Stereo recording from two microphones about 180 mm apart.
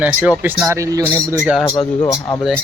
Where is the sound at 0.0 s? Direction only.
5° right (ahead or behind).